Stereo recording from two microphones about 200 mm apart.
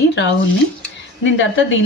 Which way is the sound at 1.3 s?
70° left (ahead or behind).